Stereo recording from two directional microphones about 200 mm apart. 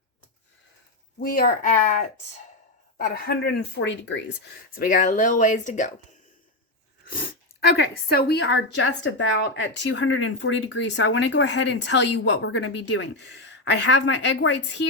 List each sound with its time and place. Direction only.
1.2 s speech: 45° left (ahead or behind)
3.0 s speech: 50° left (ahead or behind)
7.1 s a sound: 45° left (ahead or behind)
7.8 s a woman's voice: 55° left (ahead or behind)